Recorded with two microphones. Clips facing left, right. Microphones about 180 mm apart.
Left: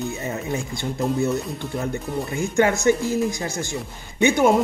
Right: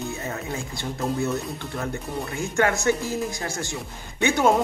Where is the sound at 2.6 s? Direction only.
15° left (ahead or behind).